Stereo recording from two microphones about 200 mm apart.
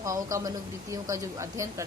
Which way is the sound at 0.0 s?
15° right (ahead or behind).